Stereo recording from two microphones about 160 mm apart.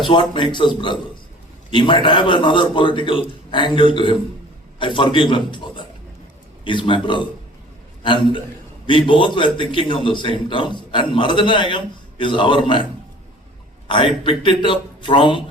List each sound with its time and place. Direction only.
0.1 s a man's voice: 30° left (ahead or behind)
13.8 s a man's voice: 30° left (ahead or behind)